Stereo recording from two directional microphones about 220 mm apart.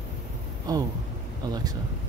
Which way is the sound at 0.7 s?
15° right (ahead or behind).